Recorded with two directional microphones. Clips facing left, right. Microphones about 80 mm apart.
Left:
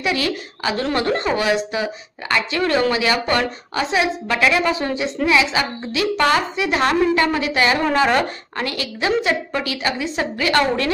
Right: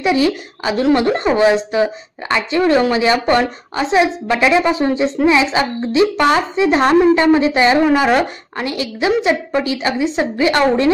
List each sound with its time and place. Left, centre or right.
0.0 s a woman's voice: centre
7.8 s a woman's voice: centre